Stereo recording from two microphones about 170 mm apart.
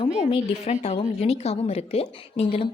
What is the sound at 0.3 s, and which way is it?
A woman's voice, 35° left (ahead or behind).